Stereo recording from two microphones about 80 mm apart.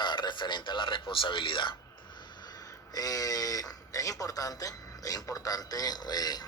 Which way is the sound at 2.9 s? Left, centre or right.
Left.